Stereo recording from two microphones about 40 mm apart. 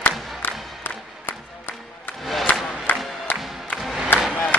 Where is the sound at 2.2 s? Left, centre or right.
Centre.